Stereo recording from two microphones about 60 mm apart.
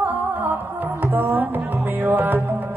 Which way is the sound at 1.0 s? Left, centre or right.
Right.